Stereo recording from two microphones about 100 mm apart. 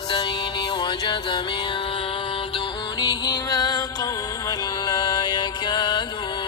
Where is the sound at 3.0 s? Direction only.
40° left (ahead or behind).